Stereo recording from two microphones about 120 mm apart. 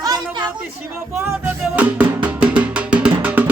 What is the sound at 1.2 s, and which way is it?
Music, 15° right (ahead or behind).